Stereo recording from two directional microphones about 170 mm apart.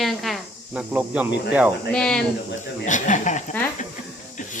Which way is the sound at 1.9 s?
5° left (ahead or behind).